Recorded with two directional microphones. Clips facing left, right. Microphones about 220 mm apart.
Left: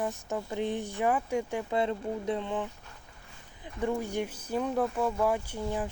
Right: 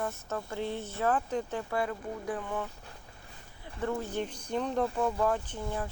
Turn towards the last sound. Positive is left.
turn(degrees=15)  # may be behind; listen again after turning